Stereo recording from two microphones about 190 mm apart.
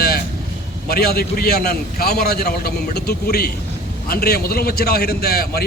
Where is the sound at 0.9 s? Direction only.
55° left (ahead or behind).